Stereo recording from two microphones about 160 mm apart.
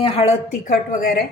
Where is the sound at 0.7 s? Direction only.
65° left (ahead or behind).